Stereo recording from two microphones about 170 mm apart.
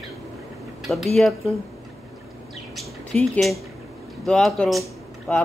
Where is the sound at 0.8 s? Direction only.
Centre (ahead or behind).